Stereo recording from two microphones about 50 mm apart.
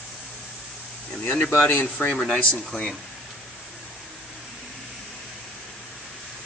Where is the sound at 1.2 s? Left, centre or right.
Left.